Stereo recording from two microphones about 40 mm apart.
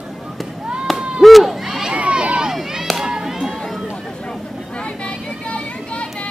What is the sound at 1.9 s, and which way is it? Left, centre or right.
Crowd, right.